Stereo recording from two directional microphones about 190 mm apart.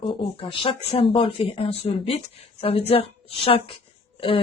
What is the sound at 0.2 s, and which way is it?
A woman's voice, 30° left (ahead or behind).